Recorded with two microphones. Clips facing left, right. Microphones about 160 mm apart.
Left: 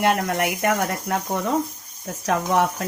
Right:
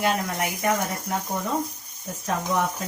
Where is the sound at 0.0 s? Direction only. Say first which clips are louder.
Left 4 dB; 70° left (ahead or behind).